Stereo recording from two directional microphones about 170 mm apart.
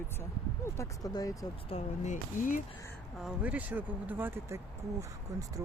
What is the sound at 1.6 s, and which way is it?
Speech, 40° left (ahead or behind).